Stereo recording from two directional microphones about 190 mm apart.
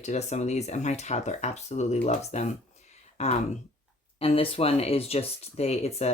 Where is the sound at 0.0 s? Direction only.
35° left (ahead or behind).